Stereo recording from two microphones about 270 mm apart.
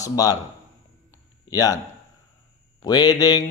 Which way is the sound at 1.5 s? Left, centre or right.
Centre.